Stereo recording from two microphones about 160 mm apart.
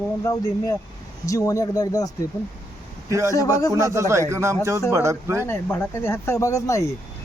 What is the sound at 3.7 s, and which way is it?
Speech, 15° right (ahead or behind).